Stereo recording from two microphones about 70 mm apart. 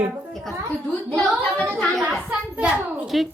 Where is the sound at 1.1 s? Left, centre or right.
Centre.